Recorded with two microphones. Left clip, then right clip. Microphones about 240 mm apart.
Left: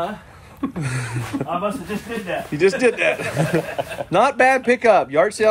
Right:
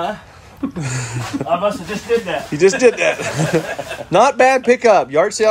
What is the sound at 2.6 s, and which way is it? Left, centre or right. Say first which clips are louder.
Speech: right 5 dB; centre.